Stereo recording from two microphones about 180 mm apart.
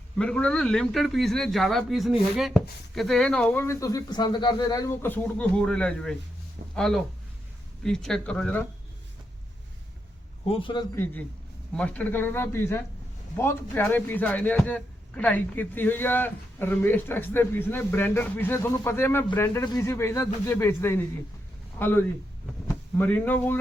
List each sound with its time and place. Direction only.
0.2 s speech: 5° left (ahead or behind)
10.5 s a man's voice: 25° left (ahead or behind)
10.9 s speech: 10° left (ahead or behind)